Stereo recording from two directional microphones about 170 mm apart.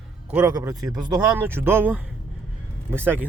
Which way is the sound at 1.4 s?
15° right (ahead or behind).